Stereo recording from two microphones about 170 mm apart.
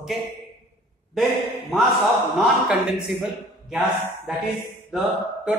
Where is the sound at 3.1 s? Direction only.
Centre (ahead or behind).